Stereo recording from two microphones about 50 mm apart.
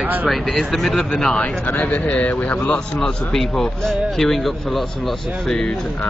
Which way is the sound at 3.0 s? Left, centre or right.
Centre.